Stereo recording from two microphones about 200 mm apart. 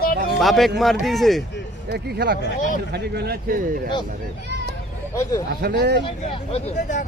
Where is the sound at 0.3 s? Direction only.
Centre (ahead or behind).